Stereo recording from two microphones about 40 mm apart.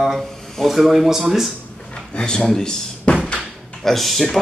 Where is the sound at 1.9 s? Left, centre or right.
Left.